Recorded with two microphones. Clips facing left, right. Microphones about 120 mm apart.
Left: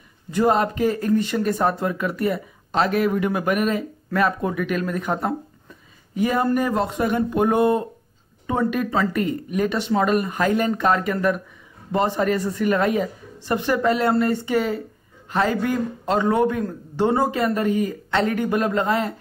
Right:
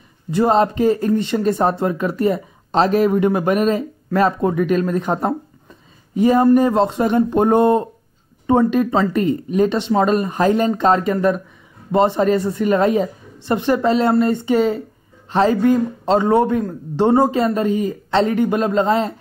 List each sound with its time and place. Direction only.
0.5 s speech: 25° right (ahead or behind)
8.5 s speech: 25° right (ahead or behind)